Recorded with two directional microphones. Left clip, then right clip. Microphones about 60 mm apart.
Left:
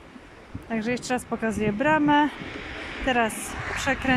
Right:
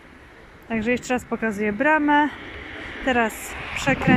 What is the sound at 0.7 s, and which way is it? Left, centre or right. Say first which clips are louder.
Speech: right 4 dB; centre.